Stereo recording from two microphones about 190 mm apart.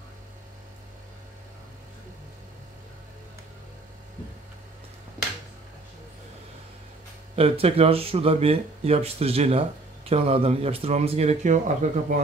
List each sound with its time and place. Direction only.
7.3 s speech: 30° right (ahead or behind)